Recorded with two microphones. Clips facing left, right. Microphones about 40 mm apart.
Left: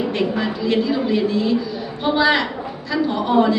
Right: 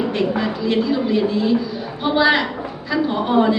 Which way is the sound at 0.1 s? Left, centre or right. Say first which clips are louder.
Right 1 dB; centre.